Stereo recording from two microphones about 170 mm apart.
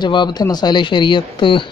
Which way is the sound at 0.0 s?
25° left (ahead or behind).